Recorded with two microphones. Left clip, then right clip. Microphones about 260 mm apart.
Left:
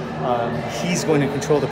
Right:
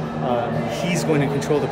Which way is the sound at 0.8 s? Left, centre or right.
Centre.